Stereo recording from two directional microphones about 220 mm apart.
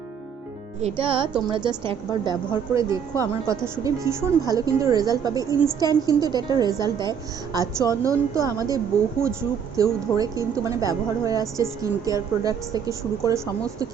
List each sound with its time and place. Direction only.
0.8 s speech: 30° right (ahead or behind)